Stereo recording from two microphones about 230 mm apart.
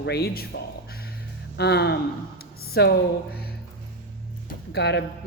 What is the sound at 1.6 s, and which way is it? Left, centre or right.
A woman's voice, left.